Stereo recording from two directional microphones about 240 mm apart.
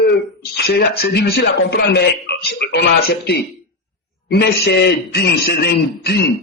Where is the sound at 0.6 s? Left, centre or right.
Left.